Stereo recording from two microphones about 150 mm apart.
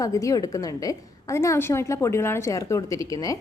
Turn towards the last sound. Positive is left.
turn(degrees=25)  # may be behind; listen again after turning